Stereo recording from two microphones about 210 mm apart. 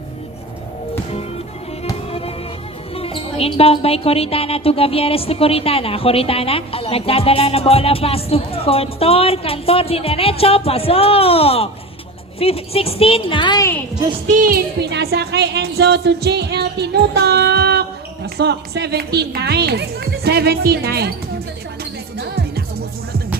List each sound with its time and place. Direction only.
1.8 s music: 30° left (ahead or behind)
2.9 s speech: 25° left (ahead or behind)
14.3 s speech: 40° right (ahead or behind)
22.2 s music: 50° right (ahead or behind)